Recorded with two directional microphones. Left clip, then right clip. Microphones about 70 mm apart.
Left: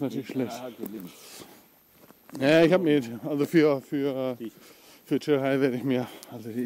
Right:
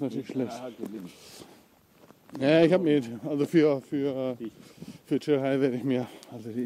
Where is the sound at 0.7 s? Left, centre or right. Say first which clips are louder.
Even; left.